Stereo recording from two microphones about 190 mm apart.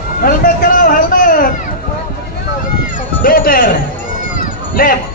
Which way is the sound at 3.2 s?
50° left (ahead or behind).